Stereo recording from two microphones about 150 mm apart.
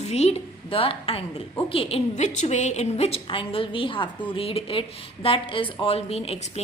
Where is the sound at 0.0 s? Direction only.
45° left (ahead or behind).